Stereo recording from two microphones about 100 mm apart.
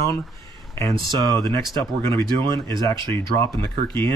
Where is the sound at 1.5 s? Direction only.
30° left (ahead or behind).